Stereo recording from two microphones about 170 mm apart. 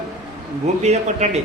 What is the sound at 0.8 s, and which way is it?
Speech, 40° right (ahead or behind).